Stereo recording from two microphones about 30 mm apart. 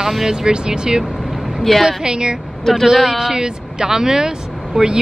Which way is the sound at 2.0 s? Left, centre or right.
Right.